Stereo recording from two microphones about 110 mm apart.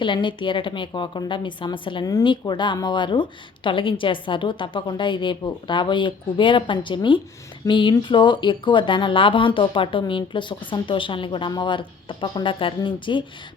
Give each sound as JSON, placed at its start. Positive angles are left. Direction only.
{"t": 0.0, "sound": "speech", "side_deg": 45}